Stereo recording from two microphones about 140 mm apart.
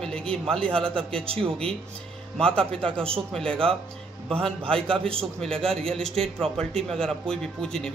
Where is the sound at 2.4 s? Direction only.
5° left (ahead or behind).